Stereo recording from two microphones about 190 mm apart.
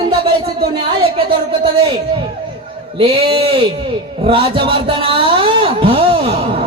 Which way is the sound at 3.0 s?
30° right (ahead or behind).